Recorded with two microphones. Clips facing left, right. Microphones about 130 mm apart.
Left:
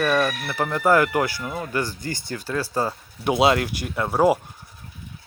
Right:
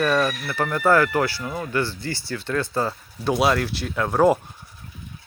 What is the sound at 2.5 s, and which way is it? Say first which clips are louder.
Speech: right 1 dB; 10° left (ahead or behind).